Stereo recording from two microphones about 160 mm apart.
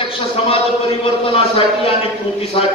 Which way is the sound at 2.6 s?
35° left (ahead or behind).